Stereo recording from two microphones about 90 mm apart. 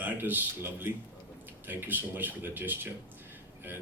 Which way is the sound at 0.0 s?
20° right (ahead or behind).